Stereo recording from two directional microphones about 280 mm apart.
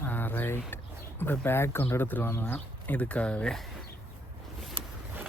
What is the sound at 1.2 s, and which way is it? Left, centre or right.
Speech, centre.